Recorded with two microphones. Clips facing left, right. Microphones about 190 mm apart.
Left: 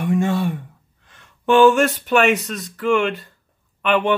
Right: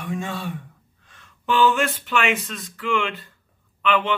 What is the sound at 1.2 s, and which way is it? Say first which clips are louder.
Speech: left 7 dB; 45° left (ahead or behind).